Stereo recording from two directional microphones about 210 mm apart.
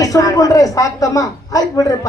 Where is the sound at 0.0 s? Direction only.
15° left (ahead or behind).